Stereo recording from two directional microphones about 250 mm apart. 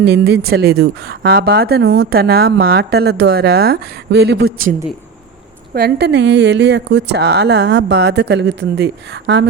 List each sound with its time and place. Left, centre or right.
0.0 s a woman's voice: right
5.7 s a woman's voice: right